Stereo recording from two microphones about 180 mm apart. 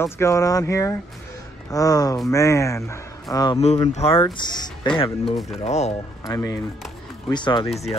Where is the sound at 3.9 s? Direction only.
35° left (ahead or behind).